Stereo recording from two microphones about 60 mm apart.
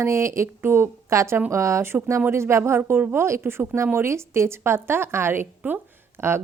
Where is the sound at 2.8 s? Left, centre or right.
Right.